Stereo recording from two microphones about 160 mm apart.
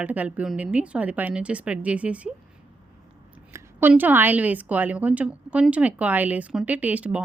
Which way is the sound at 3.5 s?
15° right (ahead or behind).